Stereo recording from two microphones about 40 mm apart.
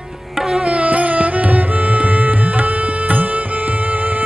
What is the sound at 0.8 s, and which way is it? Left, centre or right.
Music, right.